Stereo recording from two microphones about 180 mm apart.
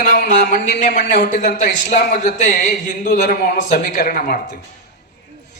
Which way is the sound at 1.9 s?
45° left (ahead or behind).